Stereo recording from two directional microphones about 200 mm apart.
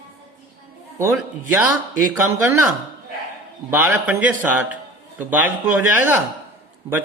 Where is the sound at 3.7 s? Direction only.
10° right (ahead or behind).